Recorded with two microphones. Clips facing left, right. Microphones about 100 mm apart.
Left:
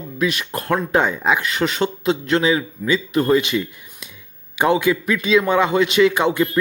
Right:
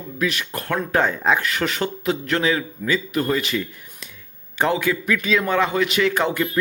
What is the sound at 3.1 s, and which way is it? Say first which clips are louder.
Speech: left 5 dB; 30° left (ahead or behind).